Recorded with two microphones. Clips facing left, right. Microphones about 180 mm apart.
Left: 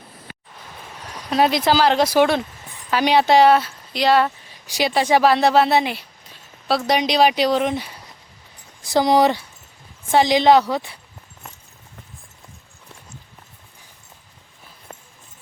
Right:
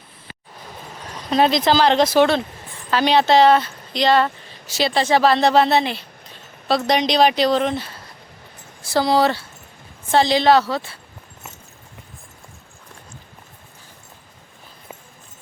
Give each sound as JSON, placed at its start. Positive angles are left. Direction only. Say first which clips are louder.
{"t": 1.1, "sound": "speech", "louder": "right 1 dB", "side_deg": 10}